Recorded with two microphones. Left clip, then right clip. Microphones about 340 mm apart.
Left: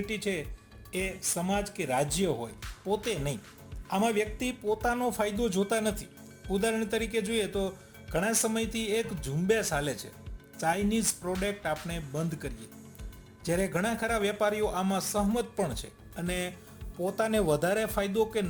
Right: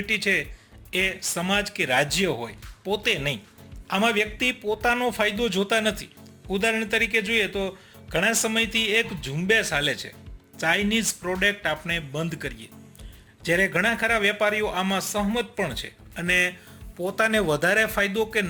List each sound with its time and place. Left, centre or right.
0.0 s speech: left
6.5 s a man's voice: left
8.1 s a man's voice: left